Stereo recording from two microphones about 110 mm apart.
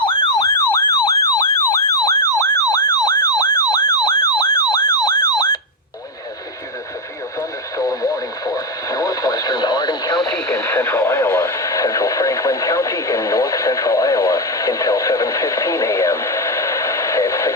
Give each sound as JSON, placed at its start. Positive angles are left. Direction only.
{"t": 0.0, "sound": "emergency vehicle", "side_deg": 50}
{"t": 0.3, "sound": "emergency vehicle", "side_deg": 25}
{"t": 7.8, "sound": "radio", "side_deg": 35}
{"t": 10.8, "sound": "radio", "side_deg": 25}